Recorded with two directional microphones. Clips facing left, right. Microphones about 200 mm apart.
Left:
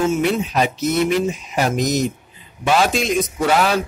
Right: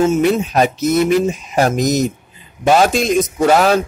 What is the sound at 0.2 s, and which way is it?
A man's voice, 45° right (ahead or behind).